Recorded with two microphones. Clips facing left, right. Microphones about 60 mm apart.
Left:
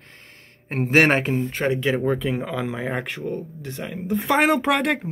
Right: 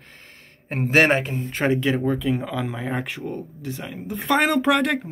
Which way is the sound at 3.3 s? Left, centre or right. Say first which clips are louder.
Left 1 dB; centre.